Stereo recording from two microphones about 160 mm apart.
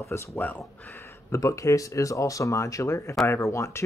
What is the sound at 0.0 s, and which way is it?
Speech, 20° left (ahead or behind).